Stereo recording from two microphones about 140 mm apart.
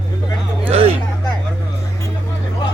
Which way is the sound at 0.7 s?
45° right (ahead or behind).